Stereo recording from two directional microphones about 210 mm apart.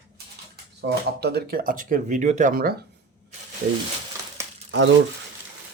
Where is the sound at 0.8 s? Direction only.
50° right (ahead or behind).